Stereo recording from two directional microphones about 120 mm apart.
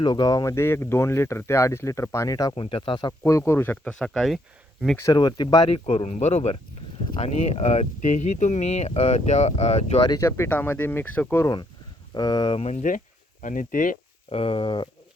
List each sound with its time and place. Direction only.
0.0 s speech: 35° left (ahead or behind)
2.6 s speech: 45° left (ahead or behind); by 3.9 s 15° left (ahead or behind)
3.9 s speech: centre (ahead or behind)
4.9 s speech: 30° left (ahead or behind)
5.7 s speech: 50° left (ahead or behind); by 10.0 s 70° left (ahead or behind)
10.1 s speech: 25° left (ahead or behind)
12.1 s speech: 35° left (ahead or behind)
12.7 s speech: 90° left
14.3 s speech: 50° left (ahead or behind)